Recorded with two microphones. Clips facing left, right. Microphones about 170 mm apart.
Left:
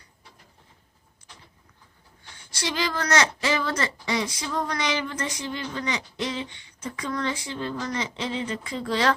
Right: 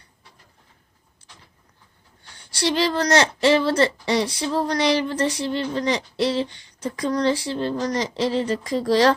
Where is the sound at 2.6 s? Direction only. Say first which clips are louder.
Right 7 dB; 35° right (ahead or behind).